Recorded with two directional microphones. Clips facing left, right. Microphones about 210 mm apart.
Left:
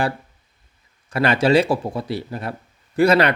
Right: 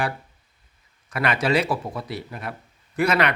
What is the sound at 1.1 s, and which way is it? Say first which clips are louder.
Speech: left 6 dB; 30° left (ahead or behind).